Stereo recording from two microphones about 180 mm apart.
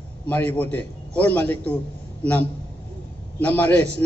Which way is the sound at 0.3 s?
10° left (ahead or behind).